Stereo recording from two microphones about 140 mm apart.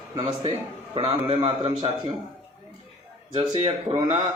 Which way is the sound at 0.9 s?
45° right (ahead or behind).